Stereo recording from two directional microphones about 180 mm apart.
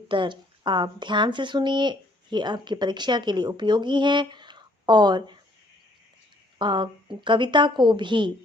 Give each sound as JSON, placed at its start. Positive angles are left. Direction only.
{"t": 0.1, "sound": "speech", "side_deg": -25}
{"t": 6.6, "sound": "speech", "side_deg": -25}